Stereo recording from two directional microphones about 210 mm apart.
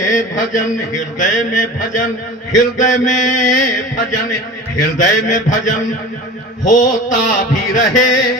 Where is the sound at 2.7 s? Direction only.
35° left (ahead or behind).